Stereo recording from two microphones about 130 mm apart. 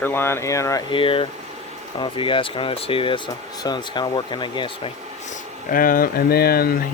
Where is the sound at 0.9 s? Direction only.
45° left (ahead or behind).